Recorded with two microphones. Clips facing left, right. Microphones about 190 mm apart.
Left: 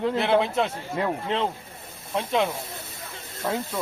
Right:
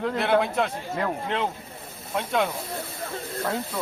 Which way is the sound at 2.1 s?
25° left (ahead or behind).